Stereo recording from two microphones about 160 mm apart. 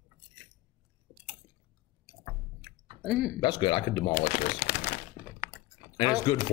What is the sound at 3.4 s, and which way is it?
Speech, 30° left (ahead or behind).